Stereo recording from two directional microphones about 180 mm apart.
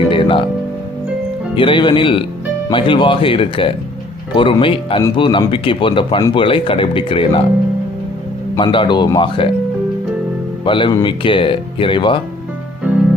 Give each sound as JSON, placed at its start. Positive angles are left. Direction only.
{"t": 0.1, "sound": "music", "side_deg": 30}
{"t": 1.5, "sound": "speech", "side_deg": 25}
{"t": 8.5, "sound": "speech", "side_deg": 25}
{"t": 10.7, "sound": "speech", "side_deg": 25}